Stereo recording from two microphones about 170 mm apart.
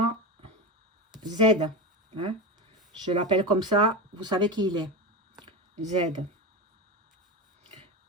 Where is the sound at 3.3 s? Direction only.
25° right (ahead or behind).